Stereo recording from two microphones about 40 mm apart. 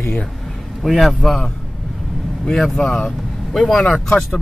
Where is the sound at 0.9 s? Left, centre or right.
Centre.